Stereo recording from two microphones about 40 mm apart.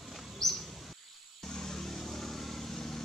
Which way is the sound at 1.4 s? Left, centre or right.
Centre.